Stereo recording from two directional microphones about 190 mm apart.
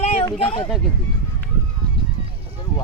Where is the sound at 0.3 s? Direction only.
25° left (ahead or behind).